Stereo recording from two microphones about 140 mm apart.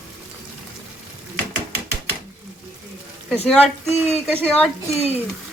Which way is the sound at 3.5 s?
5° left (ahead or behind).